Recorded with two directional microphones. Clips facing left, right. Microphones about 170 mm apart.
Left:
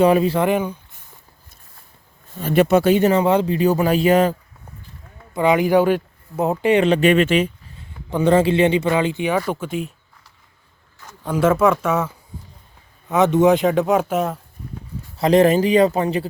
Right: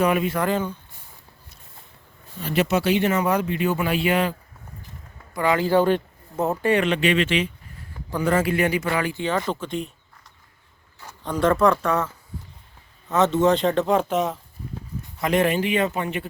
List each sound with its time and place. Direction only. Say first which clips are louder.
0.0 s speech: left 6 dB; 30° left (ahead or behind)
0.4 s speech: left 4 dB; 15° left (ahead or behind)
2.4 s speech: left 7 dB; 50° left (ahead or behind)
3.1 s speech: left 5 dB; 30° left (ahead or behind)
5.3 s speech: left 4 dB; 20° left (ahead or behind)
6.8 s speech: left 6 dB; 40° left (ahead or behind)
7.8 s speech: left 5 dB; 25° left (ahead or behind); by 9.9 s 5° left (ahead or behind)
11.2 s speech: left 3 dB; 5° left (ahead or behind)
15.2 s speech: left 7 dB; 35° left (ahead or behind)